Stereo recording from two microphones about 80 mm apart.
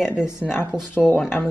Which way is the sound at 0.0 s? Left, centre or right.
Centre.